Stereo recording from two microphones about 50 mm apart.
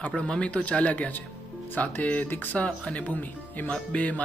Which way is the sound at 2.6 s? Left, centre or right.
Left.